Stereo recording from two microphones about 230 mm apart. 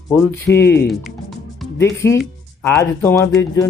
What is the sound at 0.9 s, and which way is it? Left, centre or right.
Music, centre.